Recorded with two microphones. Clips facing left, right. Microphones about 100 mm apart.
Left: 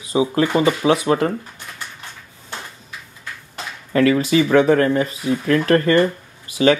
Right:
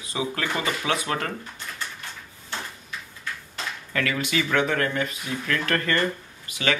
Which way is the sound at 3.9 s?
35° left (ahead or behind).